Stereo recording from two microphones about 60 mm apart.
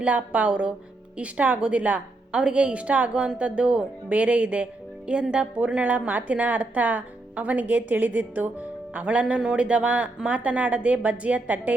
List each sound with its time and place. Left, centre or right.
0.0 s a woman's voice: right